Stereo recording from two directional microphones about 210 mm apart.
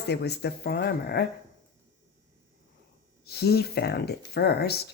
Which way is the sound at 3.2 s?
50° left (ahead or behind).